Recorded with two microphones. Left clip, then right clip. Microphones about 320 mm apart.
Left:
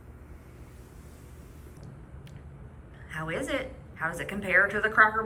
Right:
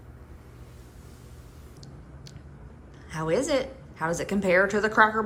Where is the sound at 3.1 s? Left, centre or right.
Centre.